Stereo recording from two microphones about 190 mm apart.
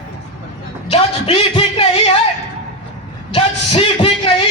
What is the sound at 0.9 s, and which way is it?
Music, 30° left (ahead or behind).